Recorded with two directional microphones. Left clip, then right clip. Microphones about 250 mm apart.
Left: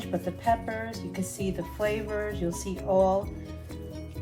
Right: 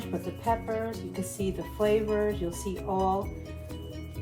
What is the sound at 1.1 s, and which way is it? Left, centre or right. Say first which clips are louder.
Speech: even; left.